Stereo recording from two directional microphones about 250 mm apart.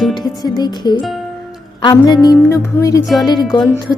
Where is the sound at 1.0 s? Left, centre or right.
Centre.